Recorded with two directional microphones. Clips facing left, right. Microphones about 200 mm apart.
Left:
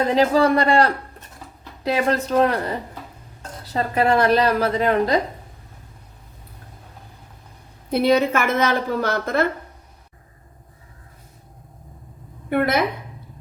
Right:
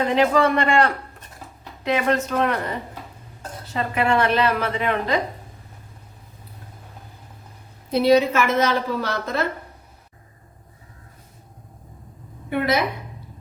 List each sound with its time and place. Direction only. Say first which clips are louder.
0.0 s a woman's voice: left 1 dB; 35° left (ahead or behind)
3.7 s a woman's voice: left 2 dB; 35° left (ahead or behind)
7.9 s a woman's voice: right 1 dB; 55° left (ahead or behind)
12.5 s a woman's voice: left 2 dB; 55° left (ahead or behind)